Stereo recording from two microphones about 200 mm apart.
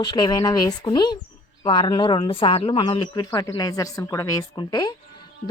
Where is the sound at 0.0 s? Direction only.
20° left (ahead or behind).